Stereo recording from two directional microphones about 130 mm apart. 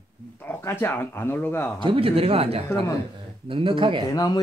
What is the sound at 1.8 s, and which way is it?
Speech, 45° right (ahead or behind).